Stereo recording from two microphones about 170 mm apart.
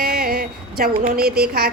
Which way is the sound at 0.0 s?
60° right (ahead or behind).